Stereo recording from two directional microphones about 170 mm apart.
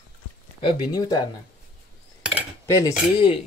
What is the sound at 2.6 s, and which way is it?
Speech, 20° left (ahead or behind).